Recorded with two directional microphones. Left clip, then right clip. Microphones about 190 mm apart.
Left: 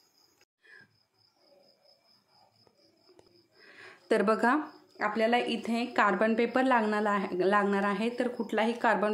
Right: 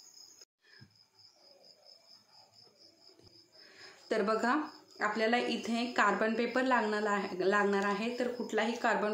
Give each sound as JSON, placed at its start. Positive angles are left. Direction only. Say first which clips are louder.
{"t": 3.6, "sound": "speech", "louder": "left 7 dB", "side_deg": 50}